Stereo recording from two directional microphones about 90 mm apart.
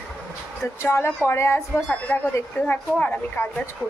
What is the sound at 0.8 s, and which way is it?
A woman's voice, 30° left (ahead or behind).